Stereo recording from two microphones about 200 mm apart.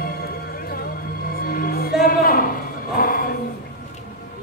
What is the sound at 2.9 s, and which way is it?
Chant, 45° left (ahead or behind).